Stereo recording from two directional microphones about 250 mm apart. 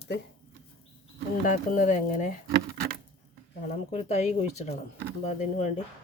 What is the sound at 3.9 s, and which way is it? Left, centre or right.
Speech, left.